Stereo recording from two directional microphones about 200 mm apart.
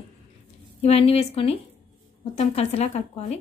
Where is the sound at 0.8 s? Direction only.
30° left (ahead or behind).